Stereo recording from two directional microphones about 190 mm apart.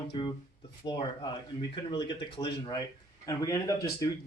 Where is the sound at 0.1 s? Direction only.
25° left (ahead or behind).